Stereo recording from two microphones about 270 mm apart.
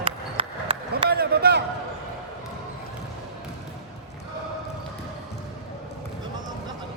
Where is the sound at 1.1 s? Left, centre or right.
Right.